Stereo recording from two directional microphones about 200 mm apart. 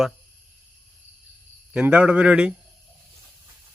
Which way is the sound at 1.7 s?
5° right (ahead or behind).